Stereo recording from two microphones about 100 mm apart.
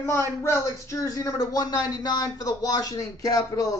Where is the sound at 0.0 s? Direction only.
25° left (ahead or behind).